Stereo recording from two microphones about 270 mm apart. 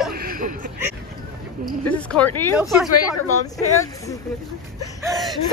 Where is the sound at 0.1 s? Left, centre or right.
Right.